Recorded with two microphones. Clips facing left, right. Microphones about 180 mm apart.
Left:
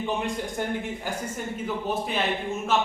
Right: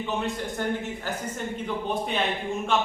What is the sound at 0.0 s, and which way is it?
Speech, 15° left (ahead or behind).